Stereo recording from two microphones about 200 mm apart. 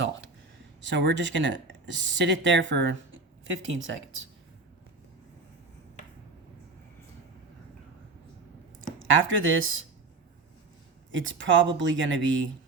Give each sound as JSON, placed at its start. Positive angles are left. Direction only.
{"t": 0.8, "sound": "speech", "side_deg": -65}
{"t": 3.5, "sound": "speech", "side_deg": -75}
{"t": 9.2, "sound": "speech", "side_deg": -80}
{"t": 11.1, "sound": "speech", "side_deg": -70}